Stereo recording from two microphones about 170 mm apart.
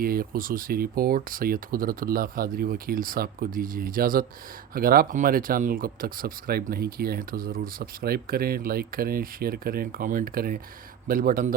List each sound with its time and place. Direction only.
0.0 s speech: 60° right (ahead or behind)